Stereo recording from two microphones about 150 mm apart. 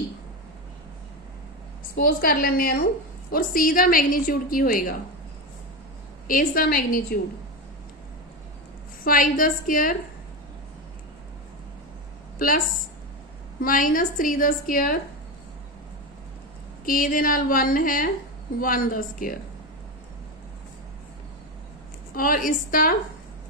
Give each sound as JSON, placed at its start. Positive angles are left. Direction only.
{"t": 2.0, "sound": "a woman's voice", "side_deg": 85}
{"t": 3.3, "sound": "a woman's voice", "side_deg": 70}
{"t": 6.2, "sound": "a woman's voice", "side_deg": 70}
{"t": 9.0, "sound": "a woman's voice", "side_deg": 70}
{"t": 12.4, "sound": "a woman's voice", "side_deg": 70}
{"t": 16.8, "sound": "a woman's voice", "side_deg": 65}
{"t": 22.1, "sound": "a woman's voice", "side_deg": 70}